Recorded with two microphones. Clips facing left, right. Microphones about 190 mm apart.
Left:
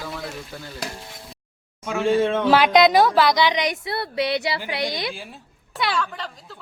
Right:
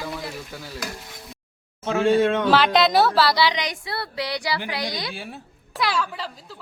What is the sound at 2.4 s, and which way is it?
Speech, 10° left (ahead or behind).